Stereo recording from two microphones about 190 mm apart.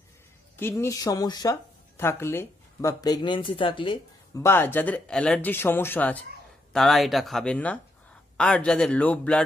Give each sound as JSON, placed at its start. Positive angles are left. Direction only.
{"t": 0.6, "sound": "speech", "side_deg": 15}
{"t": 4.4, "sound": "speech", "side_deg": 10}